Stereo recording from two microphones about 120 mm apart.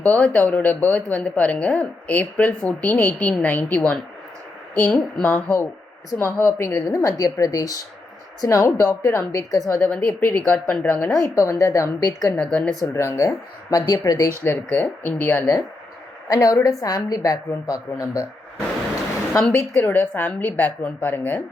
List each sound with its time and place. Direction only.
0.0 s a woman's voice: 10° left (ahead or behind); by 9.7 s 30° left (ahead or behind)
9.7 s speech: 10° left (ahead or behind)
11.1 s a woman's voice: 25° left (ahead or behind)
12.4 s speech: 10° left (ahead or behind)
12.8 s a woman's voice: 25° left (ahead or behind)
14.4 s speech: 15° left (ahead or behind)
16.3 s a woman's voice: 30° left (ahead or behind)
19.4 s speech: 10° left (ahead or behind)